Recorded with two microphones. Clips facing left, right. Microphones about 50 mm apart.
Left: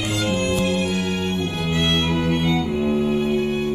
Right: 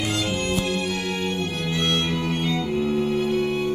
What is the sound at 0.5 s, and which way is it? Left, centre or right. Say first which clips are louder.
Music: left 3 dB; left.